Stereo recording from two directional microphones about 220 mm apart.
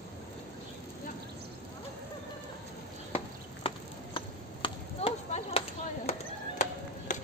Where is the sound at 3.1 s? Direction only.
25° left (ahead or behind).